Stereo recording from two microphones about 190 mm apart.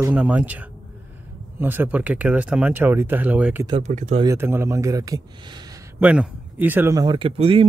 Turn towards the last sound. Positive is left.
turn(degrees=-30)  # may be behind; listen again after turning